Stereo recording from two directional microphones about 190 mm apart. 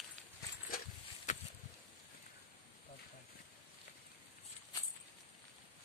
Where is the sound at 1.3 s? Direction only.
40° left (ahead or behind).